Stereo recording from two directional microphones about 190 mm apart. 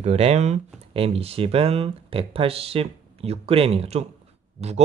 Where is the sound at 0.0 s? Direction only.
35° right (ahead or behind).